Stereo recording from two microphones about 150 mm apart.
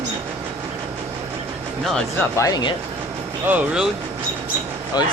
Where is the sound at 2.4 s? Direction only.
25° left (ahead or behind).